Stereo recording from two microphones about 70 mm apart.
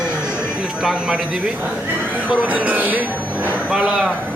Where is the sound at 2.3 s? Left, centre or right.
Centre.